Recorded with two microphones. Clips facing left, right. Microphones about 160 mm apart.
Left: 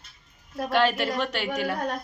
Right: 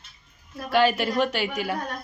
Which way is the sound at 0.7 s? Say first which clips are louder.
Right 2 dB; 5° right (ahead or behind).